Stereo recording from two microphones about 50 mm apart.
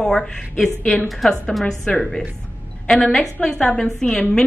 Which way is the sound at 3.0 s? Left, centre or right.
Left.